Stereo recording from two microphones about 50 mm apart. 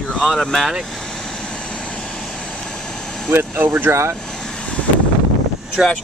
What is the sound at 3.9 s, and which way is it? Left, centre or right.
Speech, right.